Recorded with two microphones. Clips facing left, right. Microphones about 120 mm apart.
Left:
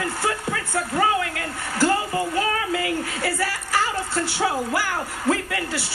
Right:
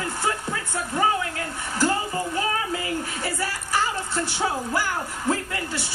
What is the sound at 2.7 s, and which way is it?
A woman's voice, 70° left (ahead or behind).